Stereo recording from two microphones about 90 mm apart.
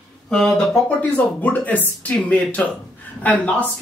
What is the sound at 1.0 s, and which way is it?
A woman's voice, 20° left (ahead or behind).